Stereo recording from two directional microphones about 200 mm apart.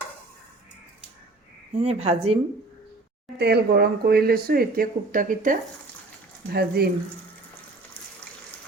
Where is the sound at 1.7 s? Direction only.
30° right (ahead or behind).